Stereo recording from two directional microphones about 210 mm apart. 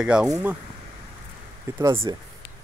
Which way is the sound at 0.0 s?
5° right (ahead or behind).